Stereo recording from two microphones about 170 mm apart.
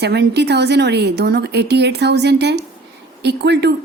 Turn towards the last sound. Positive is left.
turn(degrees=-80)